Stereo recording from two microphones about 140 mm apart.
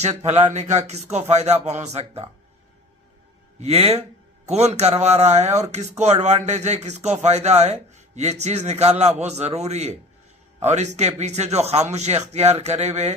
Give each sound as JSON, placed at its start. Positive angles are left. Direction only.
{"t": 0.0, "sound": "a man's voice", "side_deg": -50}
{"t": 3.6, "sound": "a man's voice", "side_deg": -45}